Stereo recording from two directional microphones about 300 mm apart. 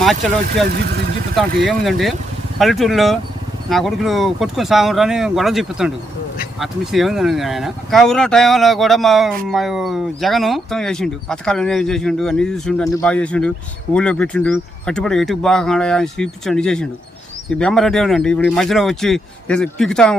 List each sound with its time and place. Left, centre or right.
0.4 s speech: right
1.4 s speech: centre